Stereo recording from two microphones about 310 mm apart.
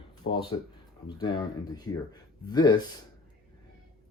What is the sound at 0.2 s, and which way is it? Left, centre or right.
Speech, left.